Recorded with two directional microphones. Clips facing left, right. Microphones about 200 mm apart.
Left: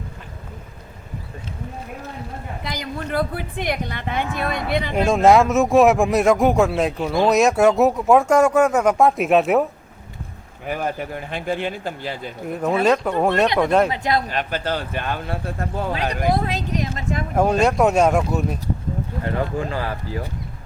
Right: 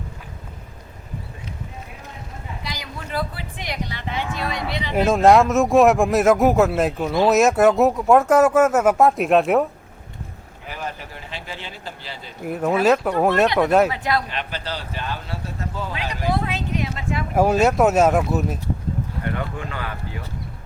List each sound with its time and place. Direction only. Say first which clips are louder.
2.6 s a woman's voice: left 7 dB; 55° left (ahead or behind)
4.9 s speech: even; centre (ahead or behind)
10.7 s a woman's voice: left 7 dB; 50° left (ahead or behind)
12.5 s speech: right 1 dB; 5° right (ahead or behind)
13.9 s a man's voice: left 2 dB; 20° left (ahead or behind)
14.3 s a woman's voice: left 5 dB; 45° left (ahead or behind)
16.3 s speech: left 2 dB; 40° left (ahead or behind)
17.3 s speech: right 1 dB; 5° right (ahead or behind)
19.2 s speech: left 6 dB; 30° left (ahead or behind)